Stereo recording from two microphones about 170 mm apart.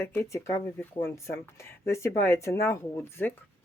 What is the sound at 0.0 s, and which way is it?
Speech, 15° left (ahead or behind).